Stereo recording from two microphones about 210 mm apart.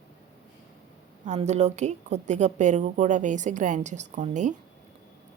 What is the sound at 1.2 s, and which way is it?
A woman's voice, 35° right (ahead or behind).